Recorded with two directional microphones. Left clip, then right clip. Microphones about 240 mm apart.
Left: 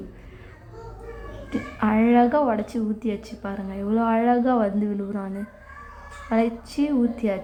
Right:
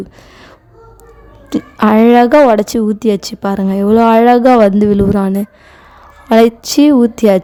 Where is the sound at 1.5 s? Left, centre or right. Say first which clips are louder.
Right 13 dB; right.